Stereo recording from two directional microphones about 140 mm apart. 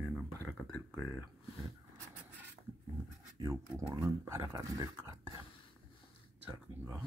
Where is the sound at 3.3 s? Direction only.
25° right (ahead or behind).